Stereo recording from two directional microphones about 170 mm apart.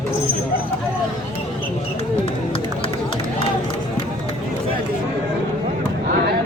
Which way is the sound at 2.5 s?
30° left (ahead or behind).